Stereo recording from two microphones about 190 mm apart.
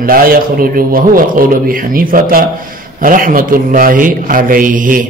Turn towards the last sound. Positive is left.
turn(degrees=-45)  # may be behind; listen again after turning